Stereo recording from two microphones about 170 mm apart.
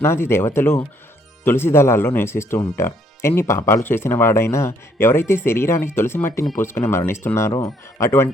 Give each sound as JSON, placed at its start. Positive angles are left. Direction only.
{"t": 0.0, "sound": "speech", "side_deg": 15}